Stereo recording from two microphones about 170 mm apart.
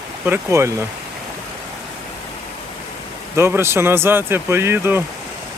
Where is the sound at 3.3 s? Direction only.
15° right (ahead or behind).